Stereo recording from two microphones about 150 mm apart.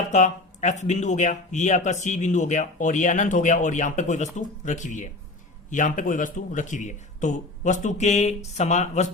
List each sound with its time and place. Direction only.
0.1 s speech: 50° left (ahead or behind)